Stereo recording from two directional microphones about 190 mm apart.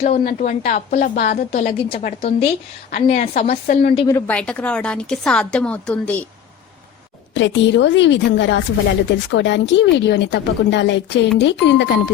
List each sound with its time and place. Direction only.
0.0 s a woman's voice: 50° left (ahead or behind)
3.3 s a woman's voice: 50° left (ahead or behind)
3.9 s a woman's voice: 20° left (ahead or behind)
4.3 s a woman's voice: 5° left (ahead or behind)
7.3 s speech: 70° left (ahead or behind)